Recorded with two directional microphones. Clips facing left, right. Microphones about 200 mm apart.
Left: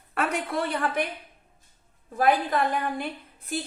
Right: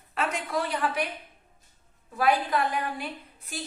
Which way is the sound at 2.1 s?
50° left (ahead or behind).